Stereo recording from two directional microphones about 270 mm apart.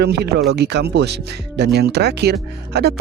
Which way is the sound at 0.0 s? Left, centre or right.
Right.